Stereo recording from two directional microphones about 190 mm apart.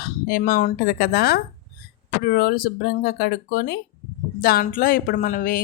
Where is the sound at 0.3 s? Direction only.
50° left (ahead or behind).